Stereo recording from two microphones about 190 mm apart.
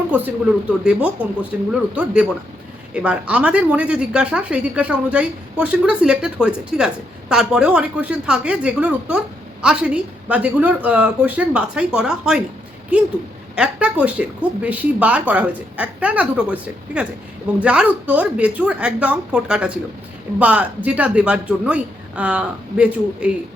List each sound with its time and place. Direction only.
0.9 s speech: 5° right (ahead or behind)